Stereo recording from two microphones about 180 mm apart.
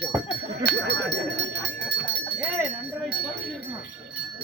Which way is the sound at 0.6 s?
65° right (ahead or behind).